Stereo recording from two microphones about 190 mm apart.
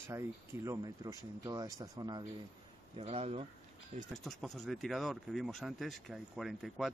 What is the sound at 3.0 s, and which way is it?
Speech, 30° right (ahead or behind).